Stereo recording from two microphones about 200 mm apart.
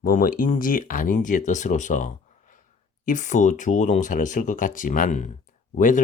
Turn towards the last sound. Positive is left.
turn(degrees=40)  # may be behind; listen again after turning